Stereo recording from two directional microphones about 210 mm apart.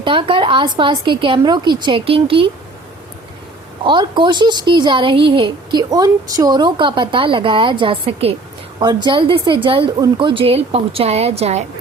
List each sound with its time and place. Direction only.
0.0 s speech: 25° right (ahead or behind)
3.8 s speech: 20° right (ahead or behind)